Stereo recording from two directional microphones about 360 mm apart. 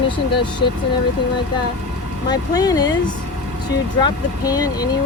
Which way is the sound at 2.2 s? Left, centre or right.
Centre.